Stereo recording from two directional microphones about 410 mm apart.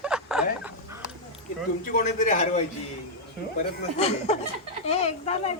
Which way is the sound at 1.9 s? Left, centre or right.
Centre.